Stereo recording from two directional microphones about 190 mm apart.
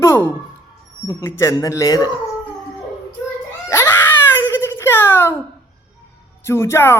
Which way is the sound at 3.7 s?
15° left (ahead or behind).